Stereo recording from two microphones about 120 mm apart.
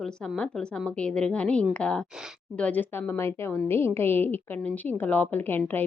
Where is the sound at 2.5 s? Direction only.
10° left (ahead or behind).